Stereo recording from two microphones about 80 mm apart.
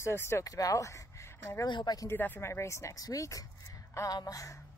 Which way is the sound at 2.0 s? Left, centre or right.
Left.